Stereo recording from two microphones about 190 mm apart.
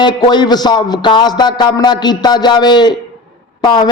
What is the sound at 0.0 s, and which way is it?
A man's voice, 25° left (ahead or behind).